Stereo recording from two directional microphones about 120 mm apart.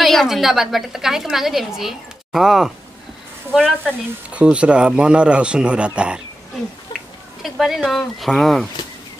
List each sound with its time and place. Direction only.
0.0 s a woman's voice: centre (ahead or behind)
3.5 s speech: 10° left (ahead or behind)
4.3 s speech: 10° right (ahead or behind)
6.9 s a sound: 35° left (ahead or behind)
7.4 s a woman's voice: centre (ahead or behind)